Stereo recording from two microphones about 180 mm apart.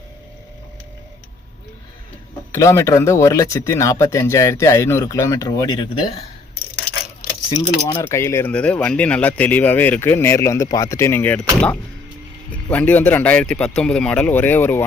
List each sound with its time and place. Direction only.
2.5 s speech: 15° left (ahead or behind)
7.5 s speech: 20° left (ahead or behind)